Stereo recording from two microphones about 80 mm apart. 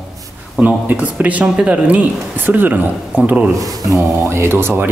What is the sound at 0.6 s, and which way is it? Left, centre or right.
Speech, centre.